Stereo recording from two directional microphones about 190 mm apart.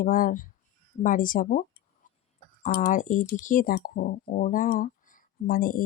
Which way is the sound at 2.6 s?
45° left (ahead or behind).